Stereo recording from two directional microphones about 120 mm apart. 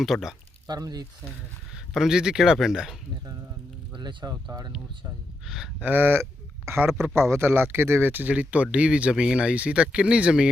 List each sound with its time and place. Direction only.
0.0 s speech: centre (ahead or behind)
0.7 s speech: 35° right (ahead or behind)
1.7 s speech: 5° right (ahead or behind)
3.9 s speech: 35° right (ahead or behind)
5.5 s speech: centre (ahead or behind)
5.8 s speech: 15° right (ahead or behind)
6.9 s speech: centre (ahead or behind)
7.2 s speech: 20° right (ahead or behind)